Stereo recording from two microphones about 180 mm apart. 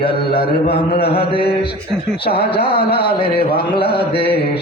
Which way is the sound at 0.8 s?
30° left (ahead or behind).